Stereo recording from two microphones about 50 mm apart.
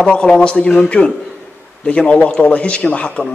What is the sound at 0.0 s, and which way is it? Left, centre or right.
A man's voice, centre.